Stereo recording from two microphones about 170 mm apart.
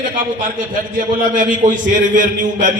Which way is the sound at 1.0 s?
50° right (ahead or behind).